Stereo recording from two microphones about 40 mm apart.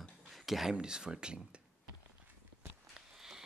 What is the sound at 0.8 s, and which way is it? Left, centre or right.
Speech, centre.